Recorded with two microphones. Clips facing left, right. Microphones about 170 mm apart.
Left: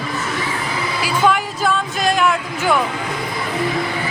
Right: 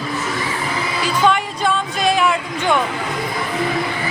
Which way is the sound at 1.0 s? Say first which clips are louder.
Even; 5° left (ahead or behind).